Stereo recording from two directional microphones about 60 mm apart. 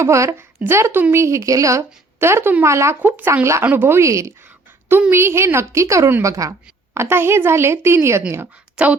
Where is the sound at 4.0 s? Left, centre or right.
Right.